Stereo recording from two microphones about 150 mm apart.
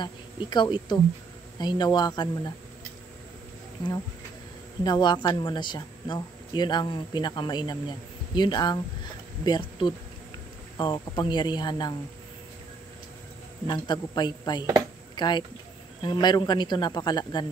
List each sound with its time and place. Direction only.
0.0 s a woman's voice: 30° left (ahead or behind)
4.8 s a woman's voice: 30° left (ahead or behind)
13.7 s a woman's voice: 30° left (ahead or behind)